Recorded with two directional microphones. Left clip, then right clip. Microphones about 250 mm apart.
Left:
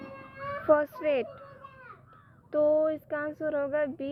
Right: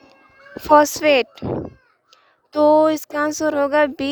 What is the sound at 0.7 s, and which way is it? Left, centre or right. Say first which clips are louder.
Speech: right 12 dB; right.